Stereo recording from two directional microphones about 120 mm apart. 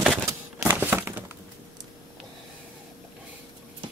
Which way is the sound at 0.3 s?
20° right (ahead or behind).